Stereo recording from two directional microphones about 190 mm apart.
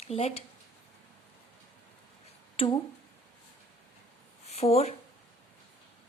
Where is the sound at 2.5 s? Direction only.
30° left (ahead or behind).